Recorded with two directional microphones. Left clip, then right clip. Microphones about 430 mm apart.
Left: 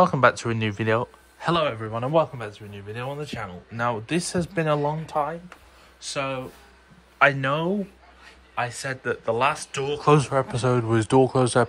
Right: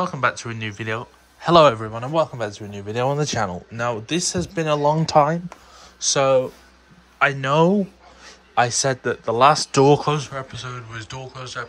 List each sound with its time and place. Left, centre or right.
0.0 s speech: centre
3.7 s speech: centre
5.0 s speech: right
5.9 s speech: centre
7.2 s speech: centre
10.0 s speech: centre